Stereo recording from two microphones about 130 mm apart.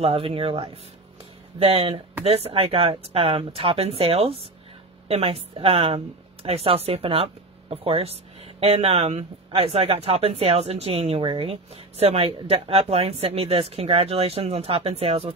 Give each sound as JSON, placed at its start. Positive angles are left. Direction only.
{"t": 0.0, "sound": "speech", "side_deg": -45}